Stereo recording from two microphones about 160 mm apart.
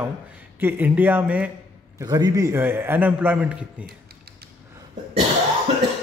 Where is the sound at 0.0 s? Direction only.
10° right (ahead or behind).